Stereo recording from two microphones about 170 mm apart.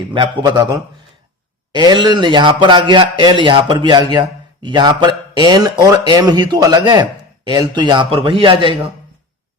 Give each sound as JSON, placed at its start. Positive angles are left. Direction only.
{"t": 0.1, "sound": "speech", "side_deg": -25}